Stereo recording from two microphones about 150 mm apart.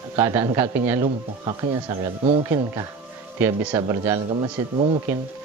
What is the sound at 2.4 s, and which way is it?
Speech, 20° right (ahead or behind).